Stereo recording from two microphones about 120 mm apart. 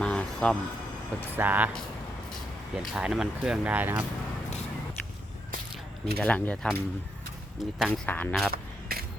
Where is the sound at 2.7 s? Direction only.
5° right (ahead or behind).